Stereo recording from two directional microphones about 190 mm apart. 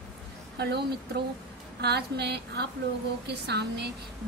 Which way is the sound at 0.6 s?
60° right (ahead or behind).